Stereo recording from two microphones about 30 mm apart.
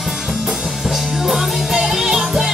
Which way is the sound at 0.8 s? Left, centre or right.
Centre.